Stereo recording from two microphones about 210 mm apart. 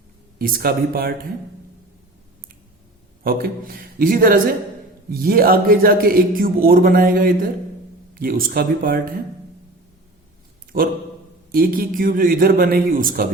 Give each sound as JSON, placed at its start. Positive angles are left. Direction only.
{"t": 0.3, "sound": "a man's voice", "side_deg": -45}
{"t": 3.2, "sound": "a man's voice", "side_deg": -45}
{"t": 10.7, "sound": "a man's voice", "side_deg": -45}